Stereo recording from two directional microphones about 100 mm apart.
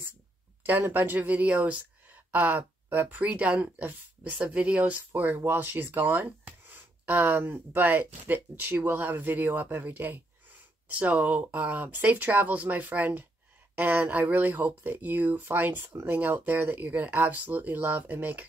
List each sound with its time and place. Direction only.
0.7 s speech: 20° right (ahead or behind)